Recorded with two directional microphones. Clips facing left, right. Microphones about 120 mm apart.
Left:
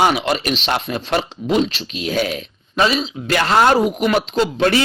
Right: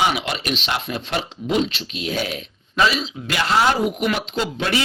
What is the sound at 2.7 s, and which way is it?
Speech, 30° left (ahead or behind).